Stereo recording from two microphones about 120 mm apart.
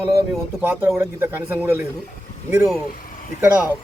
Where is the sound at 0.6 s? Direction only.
20° right (ahead or behind).